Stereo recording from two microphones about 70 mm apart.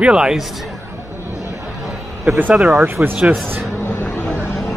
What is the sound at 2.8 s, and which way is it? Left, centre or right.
Speech, right.